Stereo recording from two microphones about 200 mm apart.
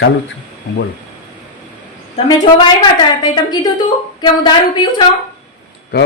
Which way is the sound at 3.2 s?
20° left (ahead or behind).